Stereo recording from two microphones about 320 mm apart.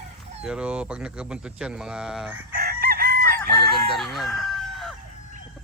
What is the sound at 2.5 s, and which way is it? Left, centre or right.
Chicken, right.